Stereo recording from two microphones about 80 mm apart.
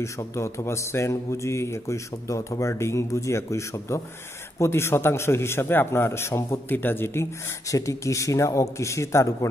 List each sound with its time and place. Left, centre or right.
0.0 s a man's voice: left
7.6 s a man's voice: left